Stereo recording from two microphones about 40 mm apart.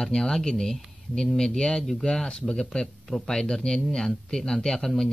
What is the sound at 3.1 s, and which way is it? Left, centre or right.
Speech, centre.